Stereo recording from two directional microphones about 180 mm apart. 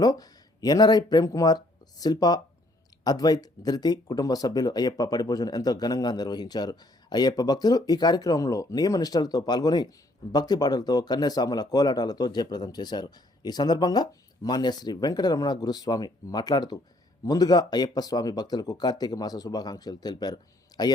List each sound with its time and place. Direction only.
0.0 s speech: 20° left (ahead or behind)